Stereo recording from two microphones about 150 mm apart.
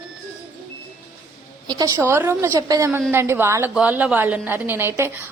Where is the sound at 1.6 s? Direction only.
25° right (ahead or behind).